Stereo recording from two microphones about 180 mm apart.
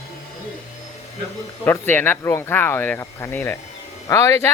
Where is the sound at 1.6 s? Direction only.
10° left (ahead or behind).